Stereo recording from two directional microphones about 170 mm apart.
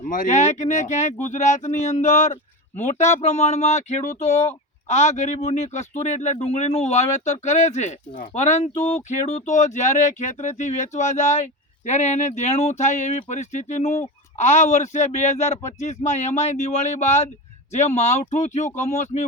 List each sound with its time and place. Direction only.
0.0 s speech: 50° left (ahead or behind)